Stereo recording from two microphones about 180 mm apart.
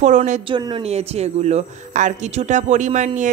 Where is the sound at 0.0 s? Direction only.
40° right (ahead or behind).